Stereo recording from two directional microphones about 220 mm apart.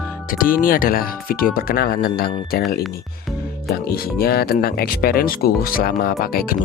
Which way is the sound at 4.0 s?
45° left (ahead or behind).